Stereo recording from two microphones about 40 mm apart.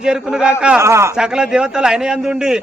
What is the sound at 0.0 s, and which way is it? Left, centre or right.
A man's voice, centre.